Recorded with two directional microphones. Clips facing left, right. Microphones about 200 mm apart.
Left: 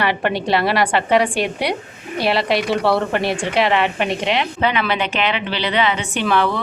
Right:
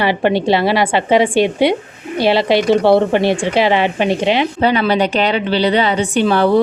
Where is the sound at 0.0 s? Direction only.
30° right (ahead or behind).